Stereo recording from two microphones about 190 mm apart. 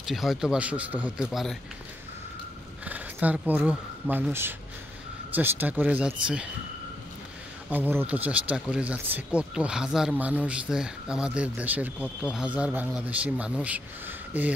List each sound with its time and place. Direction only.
0.0 s speech: centre (ahead or behind)
2.8 s speech: 10° right (ahead or behind)
7.7 s speech: 10° right (ahead or behind)